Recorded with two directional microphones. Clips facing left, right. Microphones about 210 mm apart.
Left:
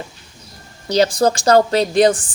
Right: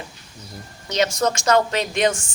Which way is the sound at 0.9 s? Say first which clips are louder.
Left 6 dB; 35° left (ahead or behind).